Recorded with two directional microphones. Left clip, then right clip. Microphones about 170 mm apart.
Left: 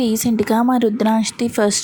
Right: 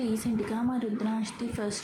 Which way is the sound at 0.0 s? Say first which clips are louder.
Left 12 dB; 60° left (ahead or behind).